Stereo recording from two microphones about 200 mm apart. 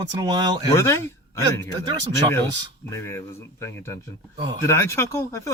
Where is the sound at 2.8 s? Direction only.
15° left (ahead or behind).